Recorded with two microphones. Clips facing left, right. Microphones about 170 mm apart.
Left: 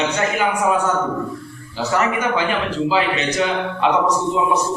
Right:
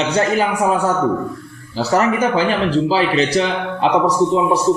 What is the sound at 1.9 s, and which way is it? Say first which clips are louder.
A man's voice: right 4 dB; 35° right (ahead or behind).